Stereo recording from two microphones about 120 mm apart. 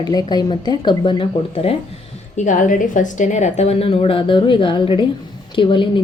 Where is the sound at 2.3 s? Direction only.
90° left; by 6.0 s 45° left (ahead or behind).